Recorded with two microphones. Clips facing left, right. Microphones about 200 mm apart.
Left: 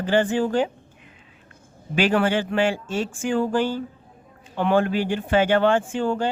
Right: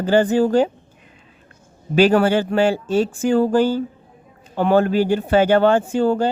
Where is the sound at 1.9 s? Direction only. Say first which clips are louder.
Right 6 dB; 40° right (ahead or behind).